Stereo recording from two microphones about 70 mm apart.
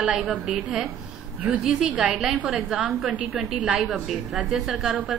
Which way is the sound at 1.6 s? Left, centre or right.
Centre.